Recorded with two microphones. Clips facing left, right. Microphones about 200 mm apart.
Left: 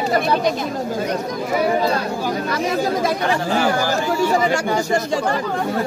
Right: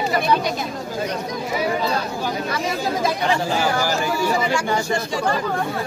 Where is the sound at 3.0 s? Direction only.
55° left (ahead or behind).